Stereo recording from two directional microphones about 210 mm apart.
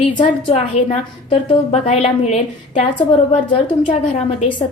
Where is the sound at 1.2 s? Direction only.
25° left (ahead or behind).